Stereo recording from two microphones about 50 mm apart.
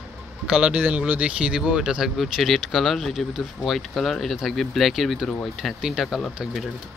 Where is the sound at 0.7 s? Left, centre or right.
Right; by 2.1 s centre.